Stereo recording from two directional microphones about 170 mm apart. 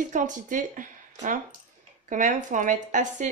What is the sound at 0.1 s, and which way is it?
Speech, 50° right (ahead or behind).